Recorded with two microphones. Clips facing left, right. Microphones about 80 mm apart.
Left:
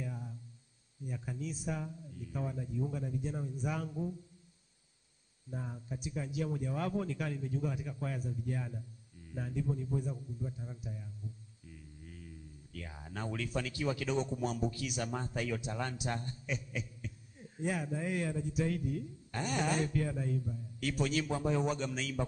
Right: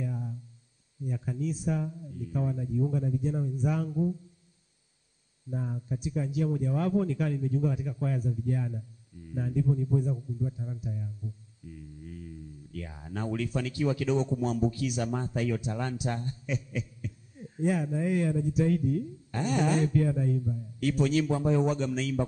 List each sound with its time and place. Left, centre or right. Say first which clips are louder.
0.0 s a sound: right 7 dB; centre
1.0 s a man's voice: right 8 dB; centre
5.5 s a man's voice: right 8 dB; centre
12.8 s a man's voice: right 6 dB; centre